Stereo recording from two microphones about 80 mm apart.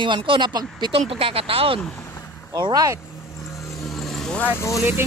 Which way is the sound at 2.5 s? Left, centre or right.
Right.